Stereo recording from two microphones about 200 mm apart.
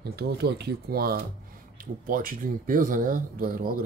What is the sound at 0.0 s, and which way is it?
Speech, 55° right (ahead or behind).